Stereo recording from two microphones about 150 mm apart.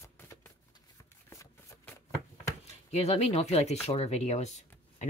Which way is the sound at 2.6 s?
45° left (ahead or behind).